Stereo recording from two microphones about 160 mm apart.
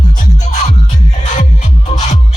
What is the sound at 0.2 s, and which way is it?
Music, 50° left (ahead or behind).